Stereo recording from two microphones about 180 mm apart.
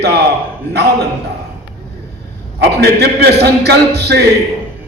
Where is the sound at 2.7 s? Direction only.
65° right (ahead or behind).